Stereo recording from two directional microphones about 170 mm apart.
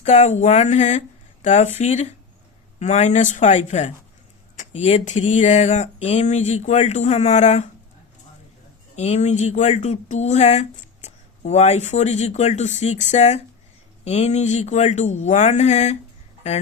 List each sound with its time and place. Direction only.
0.0 s speech: 40° left (ahead or behind)
9.0 s speech: 40° left (ahead or behind)